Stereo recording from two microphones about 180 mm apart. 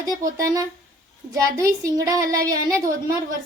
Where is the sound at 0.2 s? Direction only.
50° right (ahead or behind).